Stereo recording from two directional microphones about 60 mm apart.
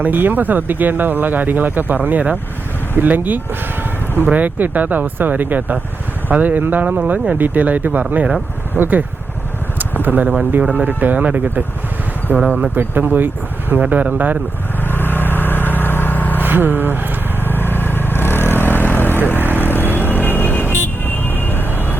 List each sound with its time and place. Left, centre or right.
0.0 s speech: right
9.7 s vehicle: right
10.6 s speech: right
14.8 s vehicle: left
16.4 s speech: right
17.4 s vehicle: left